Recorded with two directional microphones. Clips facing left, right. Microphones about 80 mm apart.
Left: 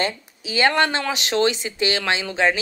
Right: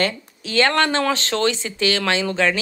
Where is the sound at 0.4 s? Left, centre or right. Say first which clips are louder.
Right 1 dB; centre.